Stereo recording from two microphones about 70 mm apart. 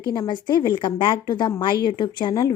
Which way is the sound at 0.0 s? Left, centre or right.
Left.